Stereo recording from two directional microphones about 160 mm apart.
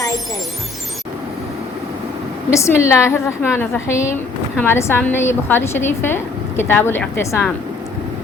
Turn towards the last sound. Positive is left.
turn(degrees=15)  # may be behind; listen again after turning